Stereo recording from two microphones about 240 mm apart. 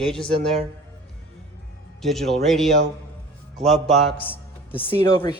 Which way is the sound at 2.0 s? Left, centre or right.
Centre.